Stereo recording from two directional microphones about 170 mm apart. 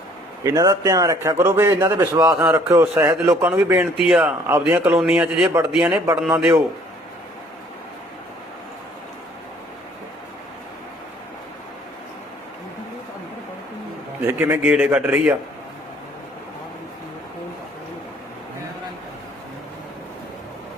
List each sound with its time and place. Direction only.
0.4 s a man's voice: 20° right (ahead or behind)
2.3 s speech: 5° right (ahead or behind)
2.6 s a man's voice: 15° right (ahead or behind)
4.5 s a man's voice: 15° right (ahead or behind)
14.3 s a man's voice: 10° right (ahead or behind)